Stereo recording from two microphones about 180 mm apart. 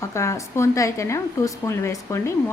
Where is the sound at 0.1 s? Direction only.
15° left (ahead or behind).